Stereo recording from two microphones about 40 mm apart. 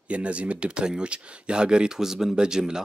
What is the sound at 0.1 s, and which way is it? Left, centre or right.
Speech, right.